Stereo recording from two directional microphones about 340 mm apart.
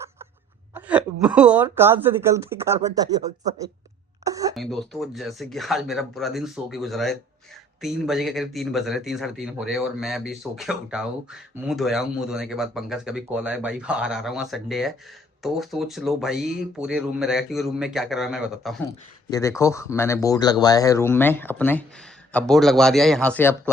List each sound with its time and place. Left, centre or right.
0.7 s a woman's voice: centre
4.2 s a sound: centre
4.5 s a man's voice: centre